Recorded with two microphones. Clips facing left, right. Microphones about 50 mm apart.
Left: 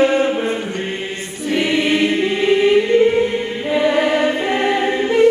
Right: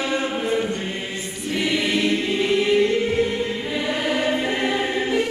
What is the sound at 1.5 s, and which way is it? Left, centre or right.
Choir, left.